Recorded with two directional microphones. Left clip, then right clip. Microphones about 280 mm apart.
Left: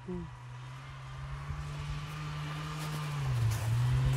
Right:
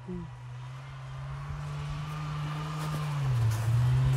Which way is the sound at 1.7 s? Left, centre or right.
Centre.